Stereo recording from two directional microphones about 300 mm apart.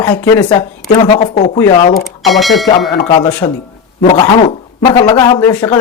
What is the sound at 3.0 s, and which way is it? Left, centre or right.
Speech, centre.